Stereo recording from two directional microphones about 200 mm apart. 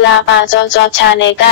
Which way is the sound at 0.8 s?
60° left (ahead or behind).